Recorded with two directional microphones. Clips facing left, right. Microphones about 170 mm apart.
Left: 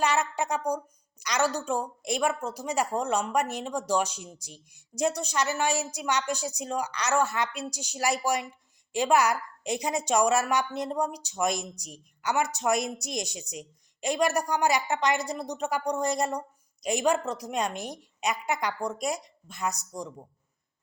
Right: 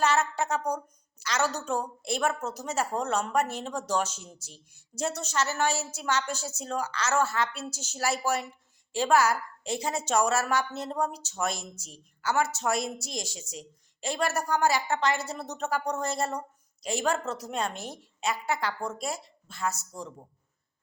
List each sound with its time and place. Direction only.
0.0 s a woman's voice: 15° left (ahead or behind)